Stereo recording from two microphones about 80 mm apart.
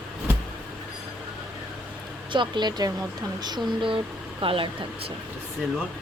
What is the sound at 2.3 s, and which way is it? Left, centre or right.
Speech, right.